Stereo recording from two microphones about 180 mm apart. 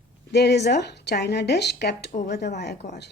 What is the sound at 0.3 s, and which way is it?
A woman's voice, 70° left (ahead or behind).